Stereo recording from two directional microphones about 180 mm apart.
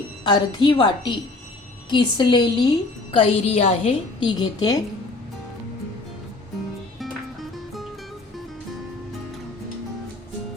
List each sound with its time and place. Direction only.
0.3 s a woman's voice: 25° left (ahead or behind)
7.5 s music: centre (ahead or behind)